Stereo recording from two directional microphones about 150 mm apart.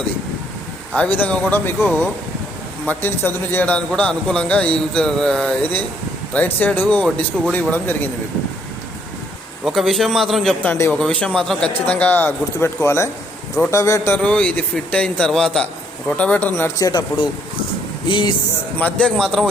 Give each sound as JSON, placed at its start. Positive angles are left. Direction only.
{"t": 0.9, "sound": "a man's voice", "side_deg": 10}
{"t": 9.6, "sound": "a man's voice", "side_deg": 0}
{"t": 10.6, "sound": "a man's voice", "side_deg": 15}
{"t": 14.2, "sound": "a man's voice", "side_deg": 10}
{"t": 16.6, "sound": "speech", "side_deg": 20}
{"t": 18.8, "sound": "a man's voice", "side_deg": 10}